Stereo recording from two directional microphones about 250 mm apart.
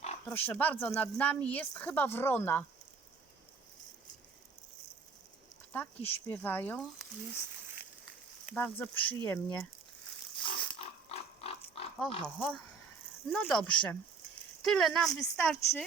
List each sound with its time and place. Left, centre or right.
0.3 s speech: centre
5.7 s speech: centre
8.4 s speech: centre
10.4 s pig: left
12.2 s speech: centre